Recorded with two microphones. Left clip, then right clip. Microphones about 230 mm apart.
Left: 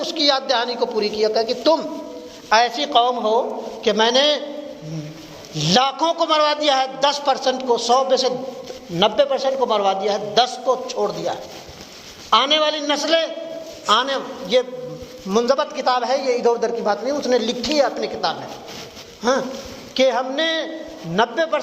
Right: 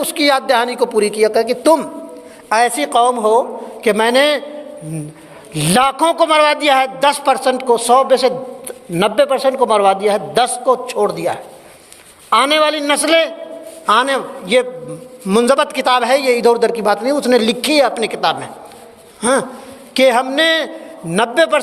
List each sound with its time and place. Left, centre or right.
0.0 s a man's voice: right
5.5 s a man's voice: right